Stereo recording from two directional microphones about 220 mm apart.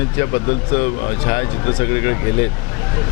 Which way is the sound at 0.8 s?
25° left (ahead or behind).